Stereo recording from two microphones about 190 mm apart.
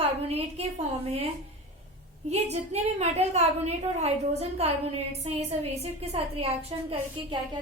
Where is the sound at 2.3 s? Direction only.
35° right (ahead or behind).